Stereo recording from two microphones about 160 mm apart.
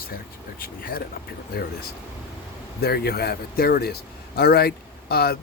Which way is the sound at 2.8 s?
75° left (ahead or behind).